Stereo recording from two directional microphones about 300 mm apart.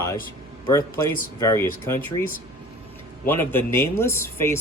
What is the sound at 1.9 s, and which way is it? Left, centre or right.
Speech, centre.